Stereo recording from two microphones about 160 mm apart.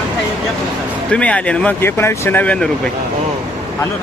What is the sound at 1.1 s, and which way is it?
Speech, 10° left (ahead or behind).